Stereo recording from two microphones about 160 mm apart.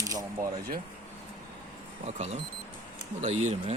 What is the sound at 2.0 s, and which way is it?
Speech, 45° right (ahead or behind).